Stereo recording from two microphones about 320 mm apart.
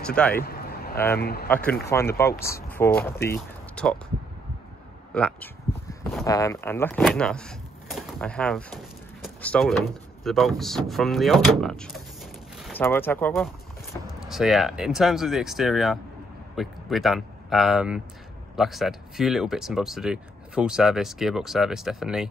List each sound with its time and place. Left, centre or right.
0.0 s speech: centre
0.3 s a sound: left
1.1 s speech: left
1.5 s speech: centre
5.1 s speech: centre
9.2 s a sound: centre
10.2 s speech: centre